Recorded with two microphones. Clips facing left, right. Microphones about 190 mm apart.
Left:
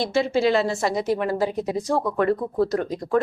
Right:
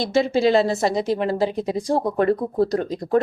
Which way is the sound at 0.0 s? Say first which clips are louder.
Right 2 dB; 35° right (ahead or behind).